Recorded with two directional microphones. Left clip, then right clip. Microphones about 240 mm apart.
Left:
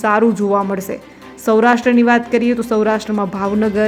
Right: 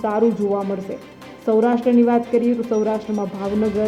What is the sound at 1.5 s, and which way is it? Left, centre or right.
Speech, centre.